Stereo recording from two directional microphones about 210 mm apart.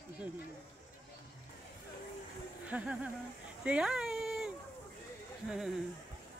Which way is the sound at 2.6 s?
5° right (ahead or behind).